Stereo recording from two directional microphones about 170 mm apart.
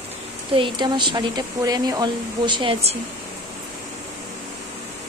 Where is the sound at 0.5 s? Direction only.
30° right (ahead or behind).